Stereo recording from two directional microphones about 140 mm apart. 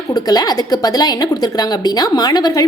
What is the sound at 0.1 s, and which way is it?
A woman's voice, 30° left (ahead or behind).